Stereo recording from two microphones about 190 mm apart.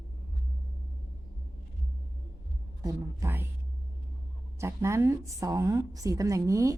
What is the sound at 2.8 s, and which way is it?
Speech, 15° right (ahead or behind).